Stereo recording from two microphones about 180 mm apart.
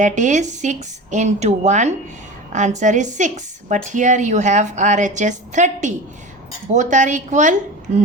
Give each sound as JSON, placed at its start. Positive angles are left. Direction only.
{"t": 0.0, "sound": "a woman's voice", "side_deg": -45}